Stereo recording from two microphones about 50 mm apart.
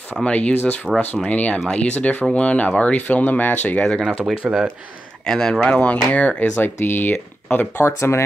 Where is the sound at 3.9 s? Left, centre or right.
Centre.